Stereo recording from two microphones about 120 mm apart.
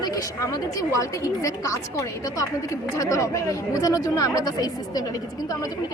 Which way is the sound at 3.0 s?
25° left (ahead or behind).